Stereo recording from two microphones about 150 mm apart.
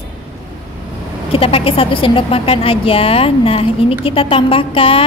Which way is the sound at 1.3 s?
40° left (ahead or behind).